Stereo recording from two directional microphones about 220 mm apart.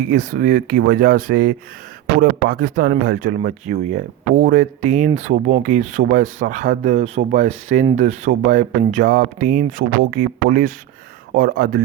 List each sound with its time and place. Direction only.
0.1 s speech: 40° right (ahead or behind)
11.3 s speech: 40° right (ahead or behind)